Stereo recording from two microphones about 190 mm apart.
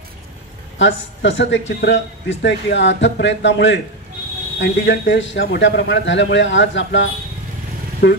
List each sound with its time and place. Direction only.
0.7 s speech: 75° left (ahead or behind)
8.0 s speech: 60° left (ahead or behind)